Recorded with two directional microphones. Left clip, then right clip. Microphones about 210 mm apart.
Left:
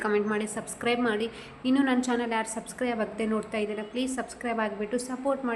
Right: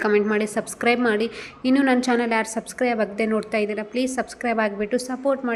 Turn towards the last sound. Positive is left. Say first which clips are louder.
# right 6 dB
turn(degrees=-20)  # may be behind; listen again after turning